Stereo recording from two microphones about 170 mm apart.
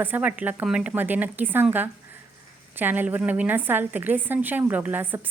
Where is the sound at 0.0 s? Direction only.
10° right (ahead or behind).